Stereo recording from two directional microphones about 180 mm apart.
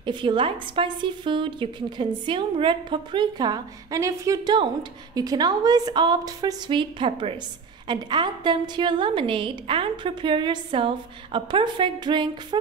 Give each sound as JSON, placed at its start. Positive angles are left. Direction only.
{"t": 0.0, "sound": "a woman's voice", "side_deg": -25}